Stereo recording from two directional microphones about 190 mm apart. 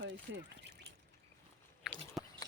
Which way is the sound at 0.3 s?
70° right (ahead or behind).